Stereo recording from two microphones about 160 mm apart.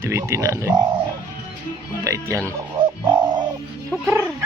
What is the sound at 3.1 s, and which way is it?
Bird, 25° right (ahead or behind).